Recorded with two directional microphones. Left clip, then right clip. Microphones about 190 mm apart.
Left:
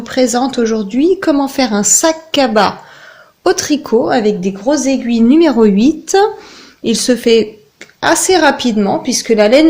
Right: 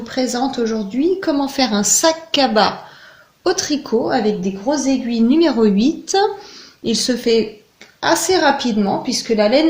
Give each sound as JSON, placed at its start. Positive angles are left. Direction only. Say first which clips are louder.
{"t": 0.0, "sound": "a woman's voice", "louder": "left 7 dB", "side_deg": 40}